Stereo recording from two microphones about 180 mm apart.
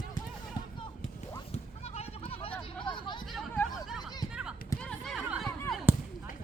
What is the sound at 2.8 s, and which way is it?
Hubbub, 25° left (ahead or behind).